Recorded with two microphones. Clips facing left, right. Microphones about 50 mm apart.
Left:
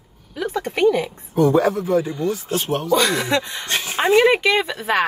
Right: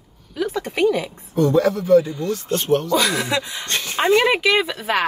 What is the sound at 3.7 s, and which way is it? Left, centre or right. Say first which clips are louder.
Speech: even; centre.